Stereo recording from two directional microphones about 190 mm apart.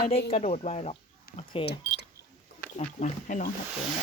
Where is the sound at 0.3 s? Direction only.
35° left (ahead or behind).